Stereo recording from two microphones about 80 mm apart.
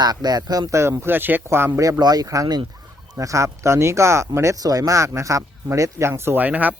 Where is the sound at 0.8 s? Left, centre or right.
Right.